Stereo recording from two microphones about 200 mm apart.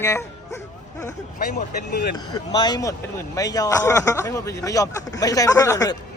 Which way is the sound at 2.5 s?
20° left (ahead or behind).